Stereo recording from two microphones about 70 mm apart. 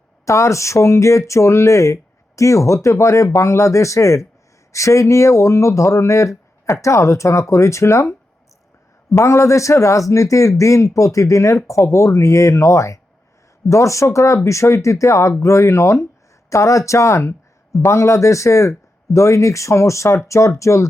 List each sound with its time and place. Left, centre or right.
0.3 s speech: left
9.1 s speech: left